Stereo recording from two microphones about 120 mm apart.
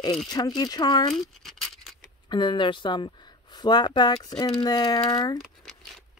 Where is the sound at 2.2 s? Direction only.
40° left (ahead or behind).